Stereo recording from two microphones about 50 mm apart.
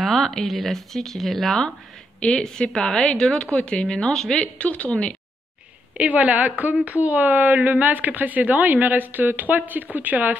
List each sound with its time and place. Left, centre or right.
0.0 s a woman's voice: centre
4.6 s a woman's voice: left
5.9 s a woman's voice: right